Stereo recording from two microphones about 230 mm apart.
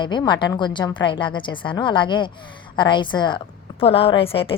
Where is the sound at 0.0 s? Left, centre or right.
Centre.